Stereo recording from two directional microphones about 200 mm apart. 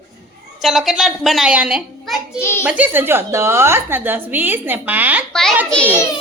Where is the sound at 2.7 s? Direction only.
10° right (ahead or behind).